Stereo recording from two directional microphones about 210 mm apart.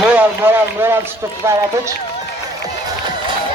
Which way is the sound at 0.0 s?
10° right (ahead or behind).